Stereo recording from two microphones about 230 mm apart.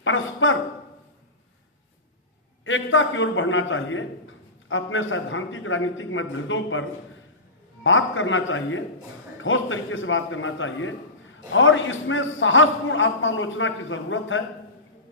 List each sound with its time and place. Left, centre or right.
0.0 s a man's voice: left
2.6 s a man's voice: left
7.9 s a man's voice: left